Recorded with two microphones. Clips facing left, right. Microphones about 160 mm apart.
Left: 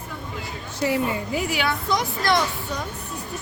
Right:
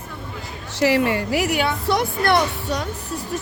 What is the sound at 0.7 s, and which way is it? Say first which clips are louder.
Speech: right 5 dB; 85° right.